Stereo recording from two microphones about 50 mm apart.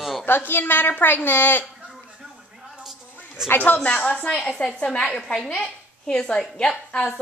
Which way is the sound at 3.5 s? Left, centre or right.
Left.